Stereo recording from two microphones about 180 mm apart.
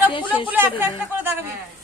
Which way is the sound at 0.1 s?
25° left (ahead or behind).